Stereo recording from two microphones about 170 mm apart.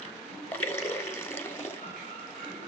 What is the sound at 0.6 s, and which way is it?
Water, 15° left (ahead or behind).